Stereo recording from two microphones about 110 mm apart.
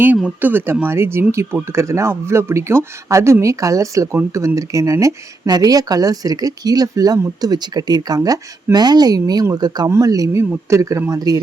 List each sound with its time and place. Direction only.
0.0 s speech: 15° right (ahead or behind); by 11.3 s 35° right (ahead or behind)